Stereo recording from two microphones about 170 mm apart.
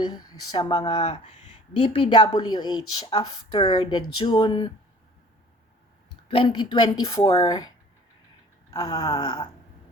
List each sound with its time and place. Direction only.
0.1 s a woman's voice: 25° left (ahead or behind)
6.2 s a woman's voice: 30° left (ahead or behind)
8.7 s a woman's voice: 20° left (ahead or behind)